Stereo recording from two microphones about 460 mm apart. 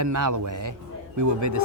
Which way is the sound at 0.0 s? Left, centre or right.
Right.